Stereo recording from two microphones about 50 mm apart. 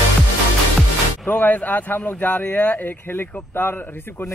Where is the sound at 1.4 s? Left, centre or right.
Left.